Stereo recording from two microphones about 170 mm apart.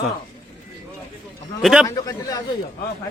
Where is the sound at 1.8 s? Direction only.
20° left (ahead or behind).